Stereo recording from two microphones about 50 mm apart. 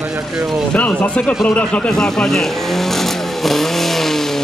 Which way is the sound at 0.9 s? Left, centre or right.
Left.